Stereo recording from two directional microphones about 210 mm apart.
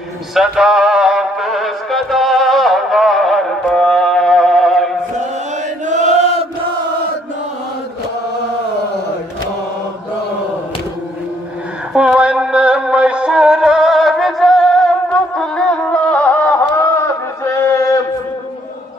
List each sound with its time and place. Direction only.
0.3 s music: centre (ahead or behind)
5.9 s chant: 35° right (ahead or behind)
11.9 s music: 5° right (ahead or behind); by 18.0 s 15° left (ahead or behind)